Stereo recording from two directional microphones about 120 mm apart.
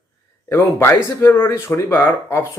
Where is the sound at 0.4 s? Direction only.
20° left (ahead or behind).